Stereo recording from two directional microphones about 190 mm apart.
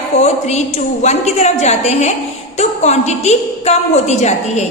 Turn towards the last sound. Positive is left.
turn(degrees=35)  # may be behind; listen again after turning